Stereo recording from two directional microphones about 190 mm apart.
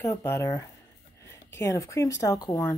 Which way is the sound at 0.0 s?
15° left (ahead or behind).